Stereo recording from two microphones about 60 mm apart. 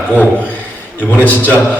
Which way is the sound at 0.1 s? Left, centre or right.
Left.